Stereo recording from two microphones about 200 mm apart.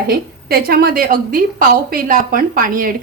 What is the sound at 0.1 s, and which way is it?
A woman's voice, 50° right (ahead or behind).